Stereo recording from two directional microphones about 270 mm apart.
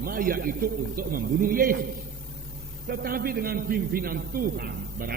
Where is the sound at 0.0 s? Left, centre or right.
Right.